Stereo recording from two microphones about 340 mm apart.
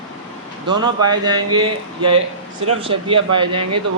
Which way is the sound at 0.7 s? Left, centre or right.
Centre.